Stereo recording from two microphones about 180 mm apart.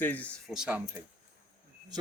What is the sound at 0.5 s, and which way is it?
Speech, 5° right (ahead or behind).